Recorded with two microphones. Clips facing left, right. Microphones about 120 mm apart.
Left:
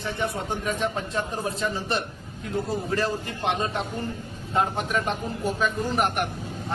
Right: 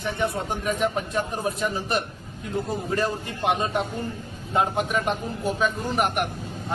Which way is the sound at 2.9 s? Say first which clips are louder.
Right 2 dB; 15° right (ahead or behind).